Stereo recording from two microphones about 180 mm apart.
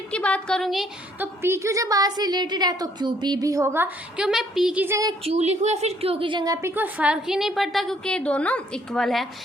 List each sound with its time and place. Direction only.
0.1 s a woman's voice: 5° left (ahead or behind)
1.4 s a woman's voice: 15° right (ahead or behind)
5.2 s a woman's voice: 35° right (ahead or behind); by 9.2 s centre (ahead or behind)